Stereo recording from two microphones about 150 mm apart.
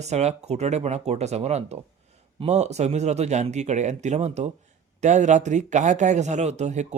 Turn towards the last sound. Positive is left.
turn(degrees=-50)  # may be behind; listen again after turning